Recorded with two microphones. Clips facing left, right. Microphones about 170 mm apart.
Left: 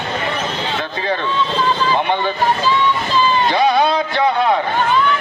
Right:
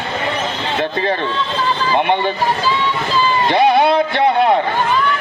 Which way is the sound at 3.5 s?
60° right (ahead or behind).